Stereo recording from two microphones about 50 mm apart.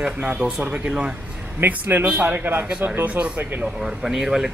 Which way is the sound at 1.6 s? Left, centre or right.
Right.